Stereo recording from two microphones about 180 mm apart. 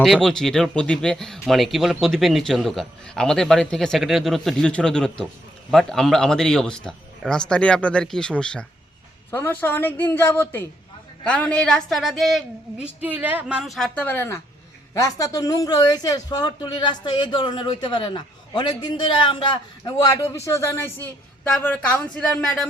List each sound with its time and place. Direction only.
0.0 s a woman's voice: centre (ahead or behind)